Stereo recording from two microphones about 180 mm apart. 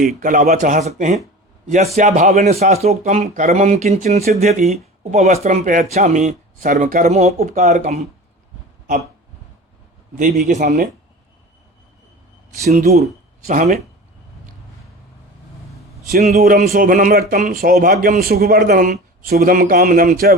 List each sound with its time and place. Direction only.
0.2 s a man's voice: 50° right (ahead or behind)
10.2 s a man's voice: 45° right (ahead or behind)
12.7 s speech: 40° right (ahead or behind)
16.4 s a man's voice: 55° right (ahead or behind)